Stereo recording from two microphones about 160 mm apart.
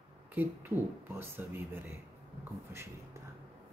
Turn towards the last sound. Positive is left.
turn(degrees=-15)  # may be behind; listen again after turning